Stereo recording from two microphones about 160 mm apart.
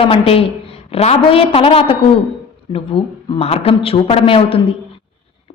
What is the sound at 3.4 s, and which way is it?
A woman's voice, 40° left (ahead or behind).